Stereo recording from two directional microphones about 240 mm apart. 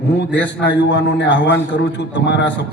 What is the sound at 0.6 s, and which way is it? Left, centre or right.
A man's voice, left.